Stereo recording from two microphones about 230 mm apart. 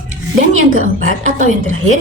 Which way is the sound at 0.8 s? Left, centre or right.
Right.